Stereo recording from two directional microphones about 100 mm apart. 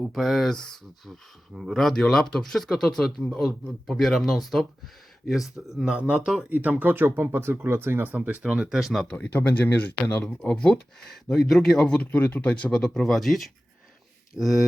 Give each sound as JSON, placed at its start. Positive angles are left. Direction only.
{"t": 0.1, "sound": "speech", "side_deg": 0}
{"t": 6.5, "sound": "speech", "side_deg": -15}
{"t": 9.0, "sound": "speech", "side_deg": 10}